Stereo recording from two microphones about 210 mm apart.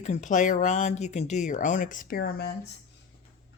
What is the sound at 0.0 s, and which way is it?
Speech, 35° left (ahead or behind).